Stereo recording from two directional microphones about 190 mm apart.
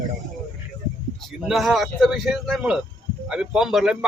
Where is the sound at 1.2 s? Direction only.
Centre (ahead or behind).